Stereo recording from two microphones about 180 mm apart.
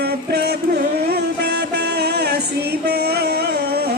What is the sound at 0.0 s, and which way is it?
Music, 65° right (ahead or behind).